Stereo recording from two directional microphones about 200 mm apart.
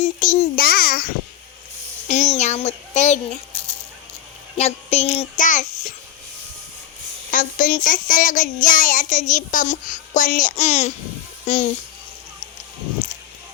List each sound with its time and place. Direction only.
0.0 s a child's voice: 40° left (ahead or behind)
2.0 s child singing: 35° left (ahead or behind)
4.5 s a child's voice: 30° left (ahead or behind)
7.3 s child singing: 40° left (ahead or behind)